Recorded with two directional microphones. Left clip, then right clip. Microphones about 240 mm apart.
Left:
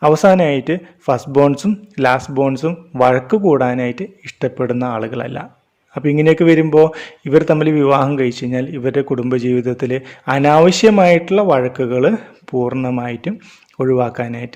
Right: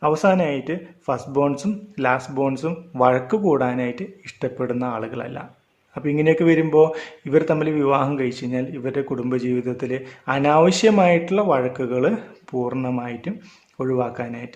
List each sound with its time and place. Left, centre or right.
0.0 s speech: left